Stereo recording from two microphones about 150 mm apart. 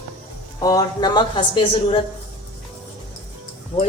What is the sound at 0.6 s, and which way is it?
Speech, 25° left (ahead or behind).